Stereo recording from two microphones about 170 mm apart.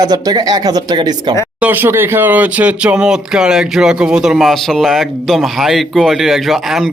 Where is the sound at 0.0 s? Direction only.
25° right (ahead or behind).